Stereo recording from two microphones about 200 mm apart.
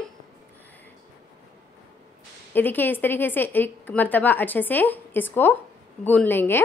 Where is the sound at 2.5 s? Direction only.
10° left (ahead or behind).